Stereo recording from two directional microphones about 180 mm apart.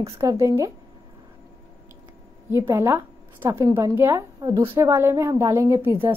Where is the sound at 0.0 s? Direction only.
15° right (ahead or behind).